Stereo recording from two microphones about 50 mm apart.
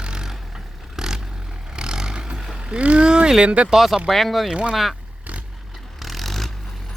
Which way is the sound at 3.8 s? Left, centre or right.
Centre.